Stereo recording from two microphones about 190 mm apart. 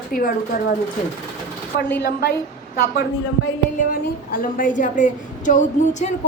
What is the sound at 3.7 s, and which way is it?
A woman's voice, 45° left (ahead or behind).